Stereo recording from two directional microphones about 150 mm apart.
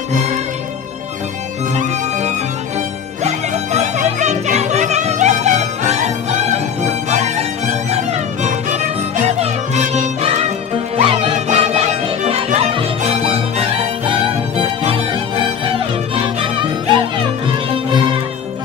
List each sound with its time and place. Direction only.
1.8 s music: 50° right (ahead or behind); by 11.3 s 35° right (ahead or behind)
11.4 s music: 45° right (ahead or behind)
16.3 s music: 35° right (ahead or behind)